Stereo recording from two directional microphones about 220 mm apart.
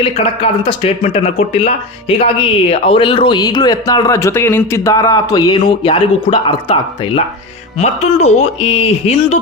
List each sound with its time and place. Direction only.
0.0 s speech: 25° left (ahead or behind)